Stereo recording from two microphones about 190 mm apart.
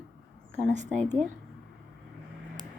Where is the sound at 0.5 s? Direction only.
40° right (ahead or behind).